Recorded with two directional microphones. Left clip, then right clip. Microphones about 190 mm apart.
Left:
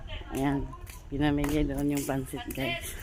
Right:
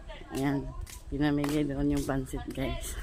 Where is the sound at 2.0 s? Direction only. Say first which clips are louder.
Left 1 dB; 5° left (ahead or behind).